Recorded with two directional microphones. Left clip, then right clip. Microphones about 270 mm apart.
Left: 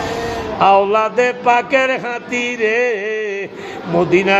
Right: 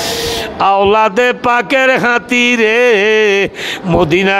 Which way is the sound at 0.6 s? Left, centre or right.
Right.